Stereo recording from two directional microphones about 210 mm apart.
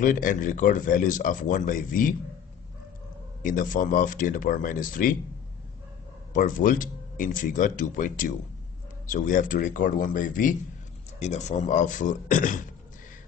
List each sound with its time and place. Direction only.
0.0 s speech: 40° left (ahead or behind)
3.4 s speech: 40° left (ahead or behind)
6.3 s speech: 40° left (ahead or behind)